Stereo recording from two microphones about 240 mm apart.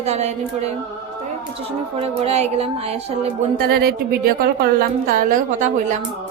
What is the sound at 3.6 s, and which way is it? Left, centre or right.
Speech, right.